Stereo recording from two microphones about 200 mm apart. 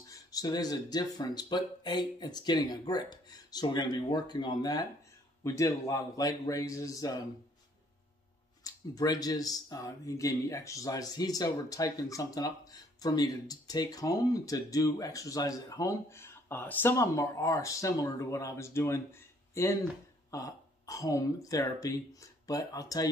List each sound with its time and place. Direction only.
0.1 s speech: 20° left (ahead or behind)
8.6 s speech: 20° left (ahead or behind)